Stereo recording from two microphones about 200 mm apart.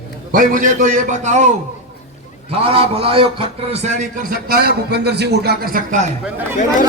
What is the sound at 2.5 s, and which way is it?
A man's voice, 30° right (ahead or behind).